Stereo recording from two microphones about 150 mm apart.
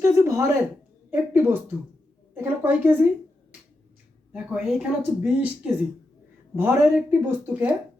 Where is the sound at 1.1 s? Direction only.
15° right (ahead or behind).